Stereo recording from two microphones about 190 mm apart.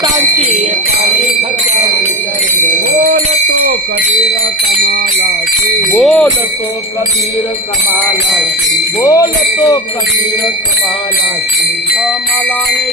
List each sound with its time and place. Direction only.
5.9 s jingle bell: centre (ahead or behind)
9.0 s jingle bell: 20° left (ahead or behind)